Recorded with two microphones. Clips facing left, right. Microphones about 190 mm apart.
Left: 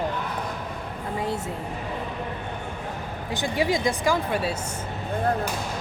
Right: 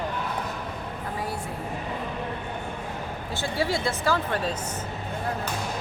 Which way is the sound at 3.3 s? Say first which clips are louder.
Left 3 dB; 15° left (ahead or behind).